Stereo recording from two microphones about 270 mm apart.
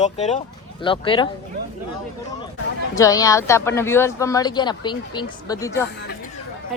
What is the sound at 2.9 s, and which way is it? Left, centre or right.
A woman's voice, centre.